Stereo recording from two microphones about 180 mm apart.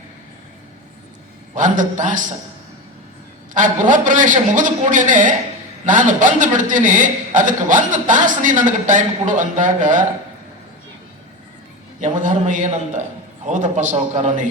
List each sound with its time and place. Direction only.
1.5 s a man's voice: 45° right (ahead or behind)
3.5 s a man's voice: 45° right (ahead or behind)
11.9 s a man's voice: 45° right (ahead or behind)